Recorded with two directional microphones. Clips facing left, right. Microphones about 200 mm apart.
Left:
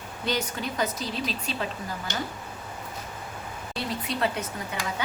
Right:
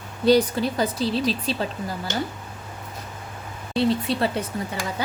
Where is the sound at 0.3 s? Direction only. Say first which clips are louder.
Right 12 dB; 35° right (ahead or behind).